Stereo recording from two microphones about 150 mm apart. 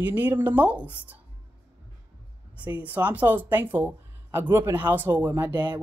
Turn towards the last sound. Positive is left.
turn(degrees=-30)  # may be behind; listen again after turning